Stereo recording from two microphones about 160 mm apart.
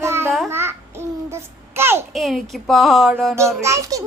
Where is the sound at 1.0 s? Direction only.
15° right (ahead or behind).